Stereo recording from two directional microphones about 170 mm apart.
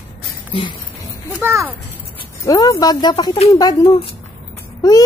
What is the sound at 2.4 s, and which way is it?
Speech, 20° left (ahead or behind).